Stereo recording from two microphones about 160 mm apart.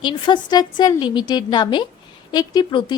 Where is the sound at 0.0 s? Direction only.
30° left (ahead or behind).